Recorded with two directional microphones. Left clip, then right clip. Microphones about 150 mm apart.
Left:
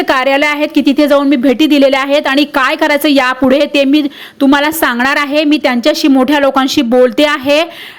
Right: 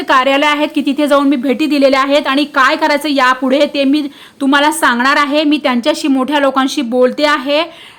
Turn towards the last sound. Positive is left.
turn(degrees=30)  # may be behind; listen again after turning